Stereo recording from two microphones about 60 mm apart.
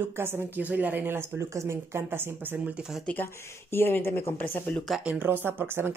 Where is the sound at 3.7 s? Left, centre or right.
Left.